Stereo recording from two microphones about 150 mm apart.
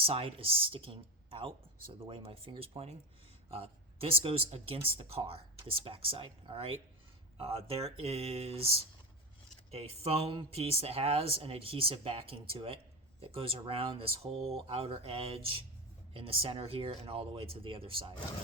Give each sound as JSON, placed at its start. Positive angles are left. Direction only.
{"t": 0.0, "sound": "speech", "side_deg": -40}